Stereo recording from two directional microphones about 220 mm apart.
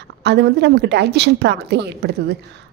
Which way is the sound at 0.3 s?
50° right (ahead or behind).